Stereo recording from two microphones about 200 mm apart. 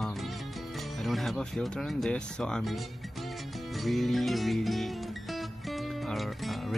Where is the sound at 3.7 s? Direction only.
Centre (ahead or behind).